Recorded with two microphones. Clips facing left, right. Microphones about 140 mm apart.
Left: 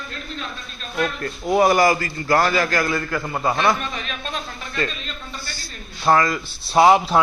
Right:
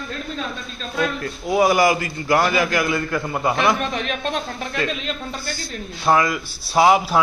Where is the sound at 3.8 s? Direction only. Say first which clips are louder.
Right 5 dB; 65° right (ahead or behind).